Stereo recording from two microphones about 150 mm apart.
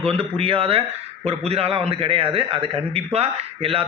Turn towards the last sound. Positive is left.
turn(degrees=-40)  # may be behind; listen again after turning